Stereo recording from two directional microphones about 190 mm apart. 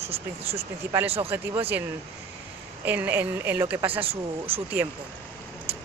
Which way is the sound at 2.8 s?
10° right (ahead or behind).